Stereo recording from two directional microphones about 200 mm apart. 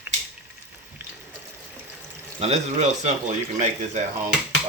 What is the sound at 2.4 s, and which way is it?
Speech, 35° right (ahead or behind).